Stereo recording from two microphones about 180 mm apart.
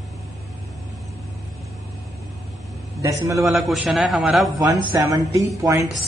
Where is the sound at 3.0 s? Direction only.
15° right (ahead or behind).